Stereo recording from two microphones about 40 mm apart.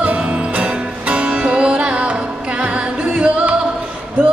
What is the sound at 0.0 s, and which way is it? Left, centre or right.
Music, right.